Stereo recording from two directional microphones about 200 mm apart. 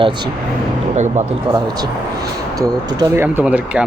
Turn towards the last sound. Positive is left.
turn(degrees=-5)  # may be behind; listen again after turning